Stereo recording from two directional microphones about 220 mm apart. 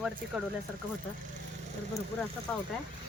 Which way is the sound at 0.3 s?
Centre (ahead or behind).